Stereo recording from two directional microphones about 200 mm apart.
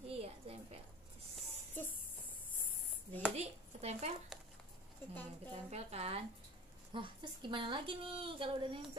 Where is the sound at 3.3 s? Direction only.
35° right (ahead or behind).